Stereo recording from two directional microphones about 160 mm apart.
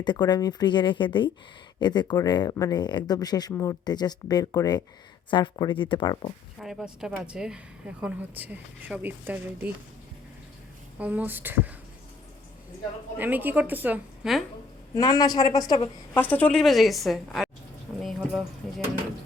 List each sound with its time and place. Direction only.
0.0 s speech: 25° left (ahead or behind)
6.6 s speech: centre (ahead or behind)
10.9 s speech: 10° right (ahead or behind)
13.1 s speech: 10° right (ahead or behind)
14.9 s speech: 20° left (ahead or behind)
16.1 s a woman's voice: 10° left (ahead or behind)
18.0 s a sound: centre (ahead or behind)